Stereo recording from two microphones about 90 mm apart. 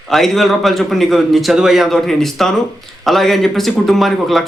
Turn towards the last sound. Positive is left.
turn(degrees=0)  # may be behind; listen again after turning